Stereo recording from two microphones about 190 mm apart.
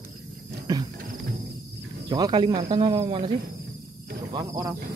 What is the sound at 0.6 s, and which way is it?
Wild animals, 20° right (ahead or behind).